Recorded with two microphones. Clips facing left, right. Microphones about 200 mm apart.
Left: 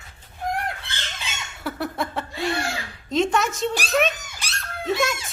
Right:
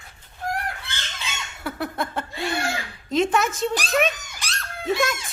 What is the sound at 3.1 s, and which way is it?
A child's voice, centre (ahead or behind).